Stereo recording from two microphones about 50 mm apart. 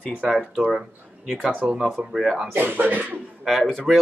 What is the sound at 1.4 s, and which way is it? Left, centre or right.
Speech, right.